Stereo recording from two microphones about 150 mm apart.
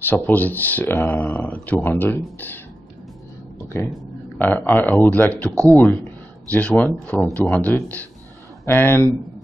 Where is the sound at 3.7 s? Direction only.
15° left (ahead or behind).